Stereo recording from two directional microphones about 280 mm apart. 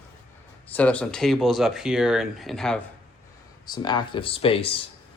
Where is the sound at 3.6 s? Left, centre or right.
Centre.